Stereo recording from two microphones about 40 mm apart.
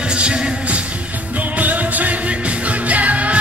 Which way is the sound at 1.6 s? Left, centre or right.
Right.